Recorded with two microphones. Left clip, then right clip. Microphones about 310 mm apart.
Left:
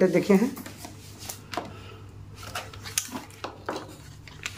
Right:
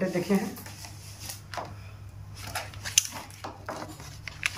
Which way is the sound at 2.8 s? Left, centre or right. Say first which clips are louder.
Right 8 dB; centre.